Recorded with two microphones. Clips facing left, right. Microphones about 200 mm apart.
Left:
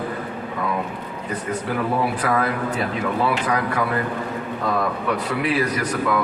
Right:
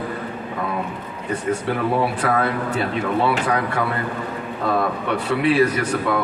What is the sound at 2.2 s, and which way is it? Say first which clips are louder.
Speech: right 1 dB; 30° right (ahead or behind).